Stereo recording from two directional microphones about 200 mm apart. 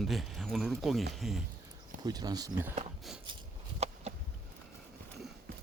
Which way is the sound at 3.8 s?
30° right (ahead or behind).